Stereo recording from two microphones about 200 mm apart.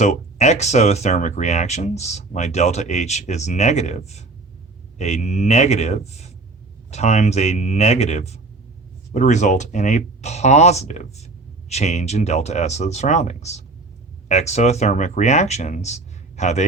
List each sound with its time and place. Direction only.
0.0 s speech: 35° left (ahead or behind)